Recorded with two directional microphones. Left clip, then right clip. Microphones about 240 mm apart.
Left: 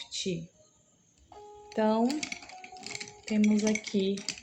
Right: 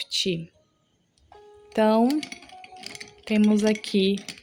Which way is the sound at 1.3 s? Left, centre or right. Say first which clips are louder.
Right 6 dB; right.